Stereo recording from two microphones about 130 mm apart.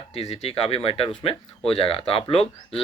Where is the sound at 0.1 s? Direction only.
50° left (ahead or behind).